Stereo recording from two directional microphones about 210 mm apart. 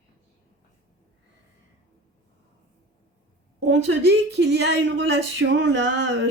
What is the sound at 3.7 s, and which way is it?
Speech, 70° right (ahead or behind).